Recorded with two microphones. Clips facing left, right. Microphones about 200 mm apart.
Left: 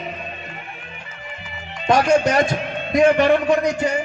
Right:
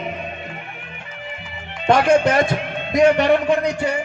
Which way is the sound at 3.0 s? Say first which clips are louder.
Even; 50° left (ahead or behind).